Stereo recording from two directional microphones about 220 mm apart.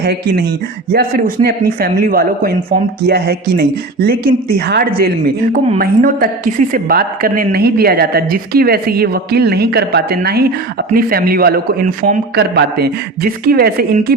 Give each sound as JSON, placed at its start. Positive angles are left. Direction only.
{"t": 0.0, "sound": "speech", "side_deg": -50}